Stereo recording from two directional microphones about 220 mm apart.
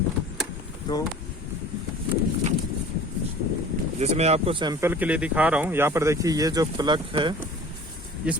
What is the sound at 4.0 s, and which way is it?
Speech, 30° right (ahead or behind).